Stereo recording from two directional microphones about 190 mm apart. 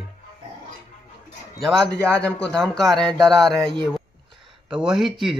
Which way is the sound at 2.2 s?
5° left (ahead or behind).